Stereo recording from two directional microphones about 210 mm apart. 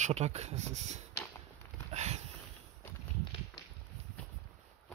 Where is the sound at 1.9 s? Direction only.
30° right (ahead or behind).